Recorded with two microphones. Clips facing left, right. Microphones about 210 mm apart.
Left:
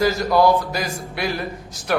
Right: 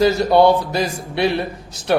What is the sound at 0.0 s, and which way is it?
Speech, 30° right (ahead or behind).